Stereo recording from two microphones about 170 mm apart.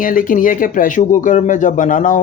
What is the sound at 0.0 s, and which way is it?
Speech, 55° left (ahead or behind).